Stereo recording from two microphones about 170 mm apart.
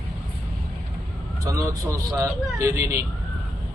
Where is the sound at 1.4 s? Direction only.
20° right (ahead or behind).